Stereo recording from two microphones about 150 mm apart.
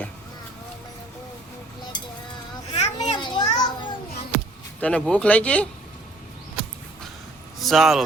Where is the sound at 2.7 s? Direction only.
45° left (ahead or behind).